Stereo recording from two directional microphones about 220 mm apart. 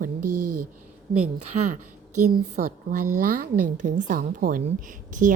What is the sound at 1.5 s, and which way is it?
Speech, 30° right (ahead or behind).